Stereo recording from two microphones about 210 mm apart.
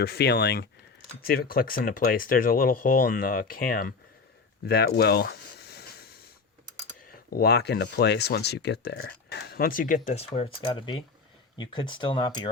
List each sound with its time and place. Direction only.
0.0 s speech: 50° left (ahead or behind)
4.6 s a sound: 50° left (ahead or behind)
7.3 s speech: 50° left (ahead or behind); by 12.5 s 20° left (ahead or behind)